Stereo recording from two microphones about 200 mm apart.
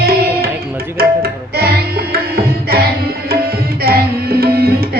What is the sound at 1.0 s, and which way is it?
Music, 50° right (ahead or behind).